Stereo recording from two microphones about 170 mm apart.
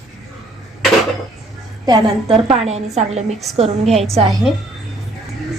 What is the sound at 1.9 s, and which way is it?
A woman's voice, 35° right (ahead or behind).